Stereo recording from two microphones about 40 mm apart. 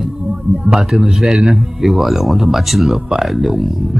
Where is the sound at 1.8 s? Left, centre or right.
Centre.